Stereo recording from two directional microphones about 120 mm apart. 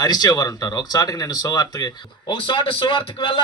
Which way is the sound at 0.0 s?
35° left (ahead or behind).